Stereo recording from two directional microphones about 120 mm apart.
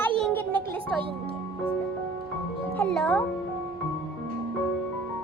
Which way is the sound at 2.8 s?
10° left (ahead or behind).